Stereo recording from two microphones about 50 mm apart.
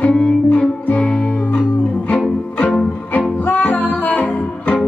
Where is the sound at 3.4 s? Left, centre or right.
Left.